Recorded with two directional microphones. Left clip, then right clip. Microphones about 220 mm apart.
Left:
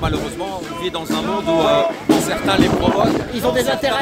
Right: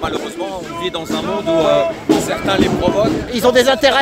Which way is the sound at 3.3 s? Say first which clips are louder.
Right 6 dB; 40° right (ahead or behind).